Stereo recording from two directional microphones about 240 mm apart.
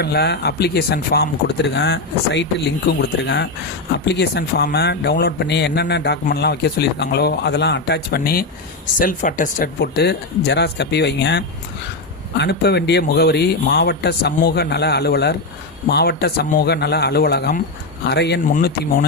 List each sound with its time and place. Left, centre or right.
0.0 s a man's voice: left